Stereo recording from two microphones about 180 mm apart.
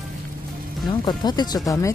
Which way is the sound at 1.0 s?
25° left (ahead or behind).